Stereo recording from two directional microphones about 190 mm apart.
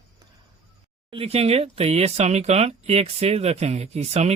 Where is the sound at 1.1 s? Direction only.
30° right (ahead or behind).